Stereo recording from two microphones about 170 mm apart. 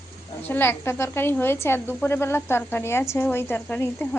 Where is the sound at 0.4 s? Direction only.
10° left (ahead or behind).